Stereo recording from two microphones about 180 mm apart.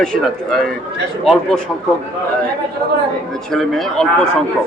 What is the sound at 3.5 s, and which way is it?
Speech, centre (ahead or behind).